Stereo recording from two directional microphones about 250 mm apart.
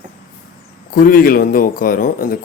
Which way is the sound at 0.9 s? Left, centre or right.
Left.